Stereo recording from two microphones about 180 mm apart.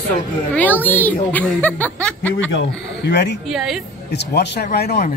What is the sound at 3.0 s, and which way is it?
Speech, 70° left (ahead or behind).